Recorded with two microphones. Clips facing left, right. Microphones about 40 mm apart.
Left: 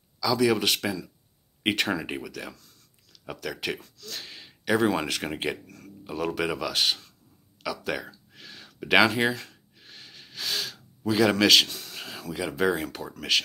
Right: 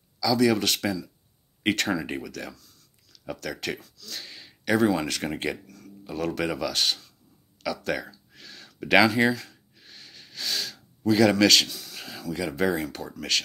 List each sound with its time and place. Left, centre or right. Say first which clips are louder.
0.2 s speech: right 1 dB; centre
3.8 s speech: even; left
7.6 s speech: right 2 dB; centre
8.3 s a sound: even; centre
11.1 s speech: right 1 dB; left
11.9 s a sound: right 2 dB; left
13.3 s speech: left 2 dB; centre